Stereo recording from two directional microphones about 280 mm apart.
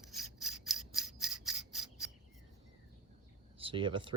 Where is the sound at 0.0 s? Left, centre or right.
Centre.